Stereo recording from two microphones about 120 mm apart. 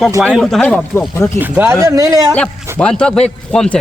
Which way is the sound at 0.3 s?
Centre (ahead or behind).